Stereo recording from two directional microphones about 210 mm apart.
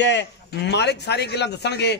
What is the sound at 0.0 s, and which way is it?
Speech, 55° left (ahead or behind).